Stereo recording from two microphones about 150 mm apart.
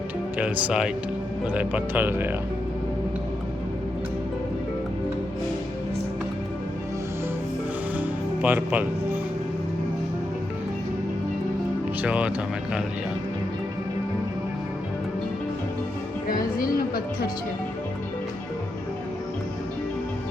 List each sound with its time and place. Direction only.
0.3 s speech: 10° right (ahead or behind)
7.9 s music: 10° right (ahead or behind)
12.0 s speech: 10° right (ahead or behind)
16.3 s speech: 75° left (ahead or behind)